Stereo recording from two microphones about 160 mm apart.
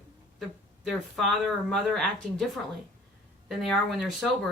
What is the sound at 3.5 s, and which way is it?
Speech, centre (ahead or behind).